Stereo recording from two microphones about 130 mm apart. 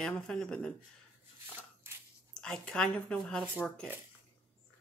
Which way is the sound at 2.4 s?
5° left (ahead or behind).